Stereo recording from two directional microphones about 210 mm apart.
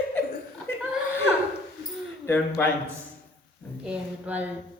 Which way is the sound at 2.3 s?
10° left (ahead or behind).